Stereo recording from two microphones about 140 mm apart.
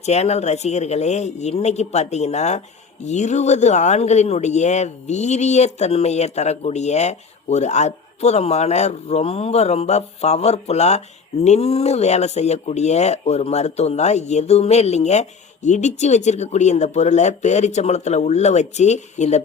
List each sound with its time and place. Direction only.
0.0 s speech: 50° left (ahead or behind)